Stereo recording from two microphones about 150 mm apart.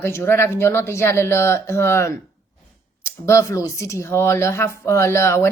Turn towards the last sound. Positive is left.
turn(degrees=15)  # may be behind; listen again after turning